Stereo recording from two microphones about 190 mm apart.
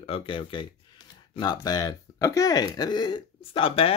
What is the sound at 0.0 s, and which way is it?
Speech, 30° left (ahead or behind).